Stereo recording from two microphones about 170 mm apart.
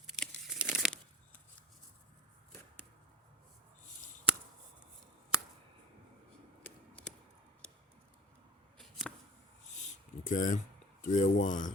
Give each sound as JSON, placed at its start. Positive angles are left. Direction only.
{"t": 0.1, "sound": "tearing", "side_deg": 0}
{"t": 8.8, "sound": "a sound", "side_deg": 0}
{"t": 10.2, "sound": "speech", "side_deg": 50}